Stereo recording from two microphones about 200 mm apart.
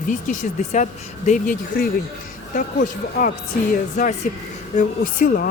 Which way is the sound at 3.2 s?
45° left (ahead or behind).